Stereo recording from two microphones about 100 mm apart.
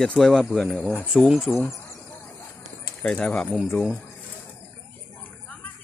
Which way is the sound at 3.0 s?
10° left (ahead or behind).